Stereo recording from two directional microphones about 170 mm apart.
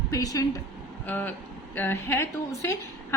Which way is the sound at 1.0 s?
10° left (ahead or behind).